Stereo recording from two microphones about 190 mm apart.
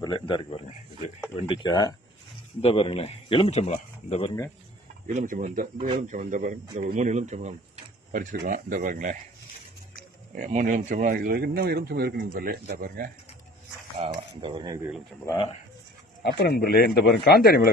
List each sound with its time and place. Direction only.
0.0 s a man's voice: 25° left (ahead or behind)
5.0 s speech: 45° right (ahead or behind)
10.3 s speech: 45° right (ahead or behind)
13.9 s speech: 30° right (ahead or behind)
16.2 s speech: 60° left (ahead or behind)